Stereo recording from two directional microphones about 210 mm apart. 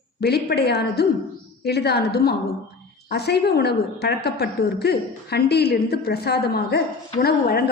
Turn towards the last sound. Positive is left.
turn(degrees=45)  # may be behind; listen again after turning